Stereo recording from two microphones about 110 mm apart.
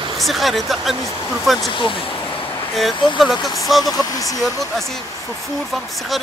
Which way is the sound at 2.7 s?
Centre (ahead or behind).